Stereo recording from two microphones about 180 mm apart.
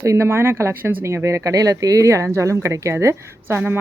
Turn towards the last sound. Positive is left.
turn(degrees=-10)  # may be behind; listen again after turning